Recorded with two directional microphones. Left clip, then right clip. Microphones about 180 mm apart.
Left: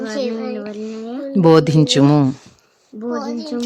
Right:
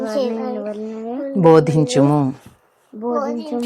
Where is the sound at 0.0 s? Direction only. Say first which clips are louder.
Right 2 dB; 20° left (ahead or behind).